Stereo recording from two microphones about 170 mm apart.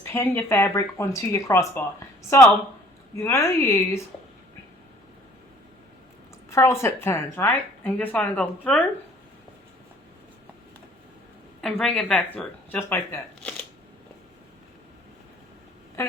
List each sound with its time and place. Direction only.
0.0 s a woman's voice: 15° left (ahead or behind)
3.2 s a woman's voice: 15° left (ahead or behind)
6.5 s a woman's voice: 15° left (ahead or behind)
11.6 s speech: 5° left (ahead or behind)